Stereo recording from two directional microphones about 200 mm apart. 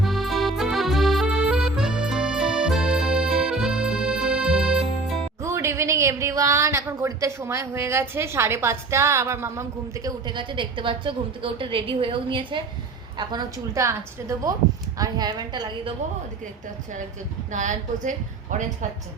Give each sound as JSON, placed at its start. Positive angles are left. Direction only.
{"t": 0.0, "sound": "accordion", "side_deg": 0}
{"t": 5.4, "sound": "a woman's voice", "side_deg": -15}
{"t": 17.5, "sound": "a woman's voice", "side_deg": -40}